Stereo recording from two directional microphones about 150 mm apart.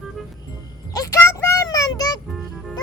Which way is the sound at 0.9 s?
20° left (ahead or behind).